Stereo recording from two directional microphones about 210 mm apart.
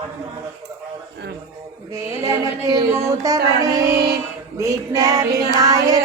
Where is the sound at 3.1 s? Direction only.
15° right (ahead or behind).